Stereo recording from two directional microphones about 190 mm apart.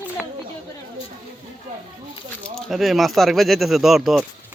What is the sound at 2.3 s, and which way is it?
Speech, centre (ahead or behind).